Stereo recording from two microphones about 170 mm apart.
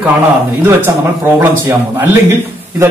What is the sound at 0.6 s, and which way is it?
A man's voice, 15° right (ahead or behind).